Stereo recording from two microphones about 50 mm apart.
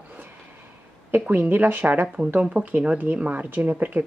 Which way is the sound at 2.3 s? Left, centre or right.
Right.